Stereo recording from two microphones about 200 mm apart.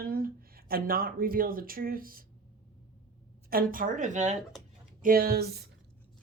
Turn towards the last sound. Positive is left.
turn(degrees=-50)  # may be behind; listen again after turning